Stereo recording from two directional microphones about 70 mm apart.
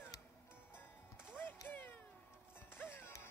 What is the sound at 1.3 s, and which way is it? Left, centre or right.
Music, left.